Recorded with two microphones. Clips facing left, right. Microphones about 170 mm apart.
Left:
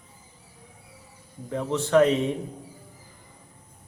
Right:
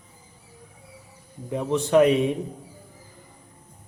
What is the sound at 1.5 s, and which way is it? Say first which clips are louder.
Speech: right 2 dB; 15° right (ahead or behind).